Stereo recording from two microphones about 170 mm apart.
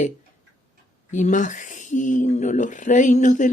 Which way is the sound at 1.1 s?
45° left (ahead or behind).